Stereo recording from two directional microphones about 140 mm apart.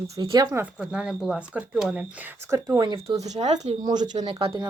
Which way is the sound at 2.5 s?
25° right (ahead or behind).